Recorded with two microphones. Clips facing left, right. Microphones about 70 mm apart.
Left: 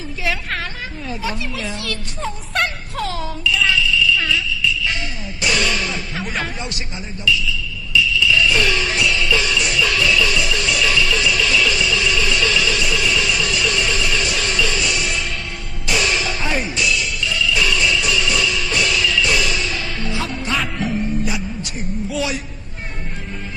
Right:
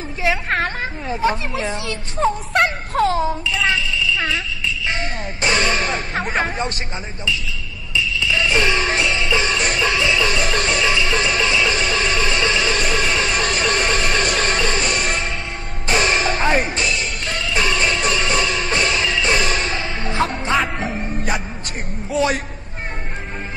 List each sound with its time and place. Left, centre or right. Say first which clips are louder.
0.2 s a woman's voice: right 5 dB; right
3.6 s jingle bell: left 2 dB; right
5.4 s speech: right 1 dB; right
7.2 s basketball bounce: left 6 dB; right
10.9 s music: even; right
21.1 s music: even; right
22.1 s a man's voice: right 6 dB; right